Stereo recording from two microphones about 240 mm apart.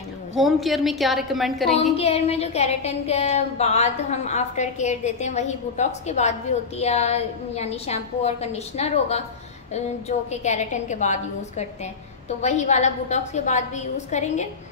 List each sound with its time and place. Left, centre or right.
0.4 s a woman's voice: centre
2.0 s a woman's voice: left